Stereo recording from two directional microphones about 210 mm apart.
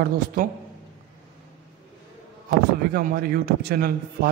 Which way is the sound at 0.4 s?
40° right (ahead or behind).